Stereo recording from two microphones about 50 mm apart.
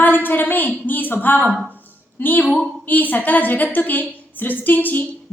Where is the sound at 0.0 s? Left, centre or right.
Left.